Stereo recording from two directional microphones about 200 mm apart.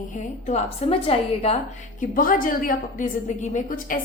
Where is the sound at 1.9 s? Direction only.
45° left (ahead or behind).